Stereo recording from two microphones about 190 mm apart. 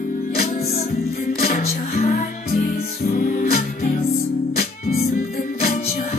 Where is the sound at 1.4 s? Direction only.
50° left (ahead or behind).